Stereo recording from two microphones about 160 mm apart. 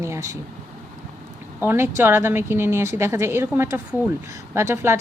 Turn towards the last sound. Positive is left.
turn(degrees=-15)  # may be behind; listen again after turning